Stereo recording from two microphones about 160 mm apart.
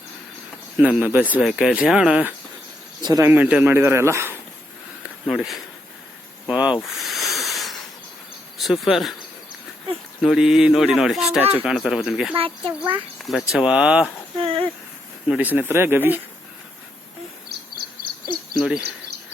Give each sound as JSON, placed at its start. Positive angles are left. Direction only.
{"t": 0.8, "sound": "speech", "side_deg": -10}
{"t": 3.0, "sound": "speech", "side_deg": -25}
{"t": 3.2, "sound": "speech", "side_deg": -10}
{"t": 5.2, "sound": "speech", "side_deg": 0}
{"t": 6.8, "sound": "snake", "side_deg": 0}
{"t": 8.5, "sound": "speech", "side_deg": 0}
{"t": 10.2, "sound": "speech", "side_deg": 0}
{"t": 12.3, "sound": "speech", "side_deg": -35}
{"t": 13.2, "sound": "speech", "side_deg": 0}
{"t": 14.3, "sound": "a sound", "side_deg": -35}
{"t": 15.3, "sound": "speech", "side_deg": -10}
{"t": 17.5, "sound": "bird vocalization", "side_deg": -85}
{"t": 18.0, "sound": "a sound", "side_deg": -60}